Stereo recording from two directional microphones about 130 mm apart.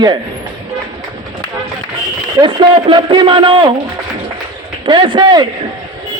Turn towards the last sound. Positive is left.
turn(degrees=-35)  # may be behind; listen again after turning